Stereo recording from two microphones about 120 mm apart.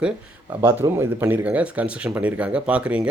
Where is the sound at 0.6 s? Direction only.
20° right (ahead or behind).